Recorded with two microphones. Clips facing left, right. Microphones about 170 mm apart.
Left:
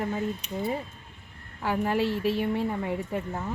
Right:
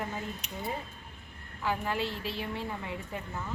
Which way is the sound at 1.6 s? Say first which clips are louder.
Left 6 dB; 60° left (ahead or behind).